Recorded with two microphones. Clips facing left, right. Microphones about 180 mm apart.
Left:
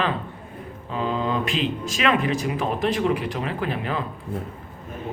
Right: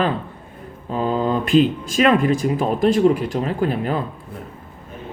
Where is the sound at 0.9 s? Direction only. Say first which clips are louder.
Right 5 dB; 40° right (ahead or behind).